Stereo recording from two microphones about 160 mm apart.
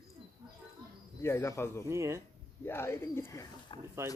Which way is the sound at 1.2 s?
20° left (ahead or behind).